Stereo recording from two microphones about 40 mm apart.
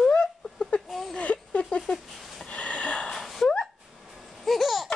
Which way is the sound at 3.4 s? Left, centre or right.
Centre.